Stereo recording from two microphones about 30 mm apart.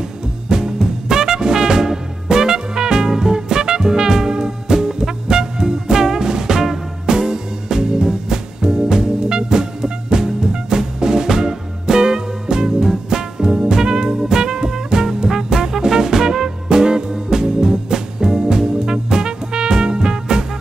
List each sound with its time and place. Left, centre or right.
0.5 s music: right